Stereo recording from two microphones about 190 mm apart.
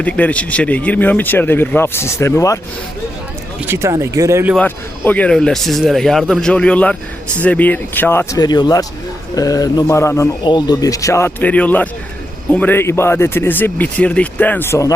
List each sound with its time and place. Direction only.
0.0 s speech: 5° left (ahead or behind)
3.7 s speech: 15° right (ahead or behind)
4.5 s speech: 10° left (ahead or behind)